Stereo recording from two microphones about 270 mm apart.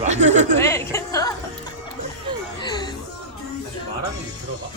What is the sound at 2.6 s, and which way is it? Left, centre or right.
Speech, centre.